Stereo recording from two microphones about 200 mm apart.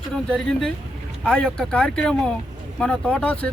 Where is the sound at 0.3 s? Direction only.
5° left (ahead or behind).